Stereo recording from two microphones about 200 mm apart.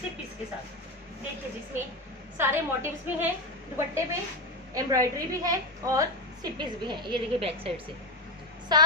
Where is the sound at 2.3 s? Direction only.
10° right (ahead or behind).